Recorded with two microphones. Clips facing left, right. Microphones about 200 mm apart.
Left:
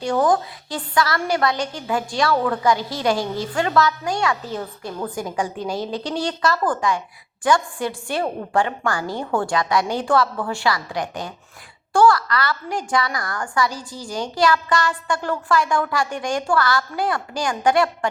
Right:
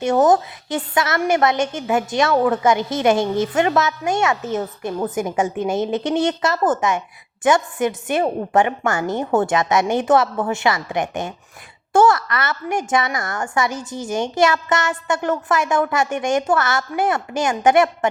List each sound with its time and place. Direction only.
0.0 s a woman's voice: 20° right (ahead or behind)